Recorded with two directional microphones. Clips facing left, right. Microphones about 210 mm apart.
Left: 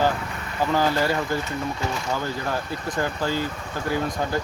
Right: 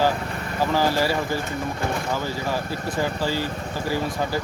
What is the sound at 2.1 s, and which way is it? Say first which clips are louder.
Speech: right 1 dB; 5° right (ahead or behind).